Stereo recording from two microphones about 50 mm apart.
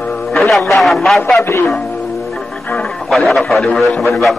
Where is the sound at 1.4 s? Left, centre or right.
Left.